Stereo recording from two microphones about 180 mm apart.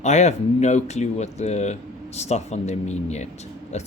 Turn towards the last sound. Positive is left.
turn(degrees=40)  # may be behind; listen again after turning